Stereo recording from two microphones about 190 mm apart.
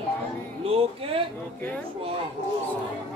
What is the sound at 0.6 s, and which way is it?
Music, 30° right (ahead or behind).